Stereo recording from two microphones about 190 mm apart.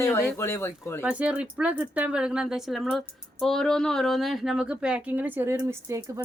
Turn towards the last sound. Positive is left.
turn(degrees=-15)  # may be behind; listen again after turning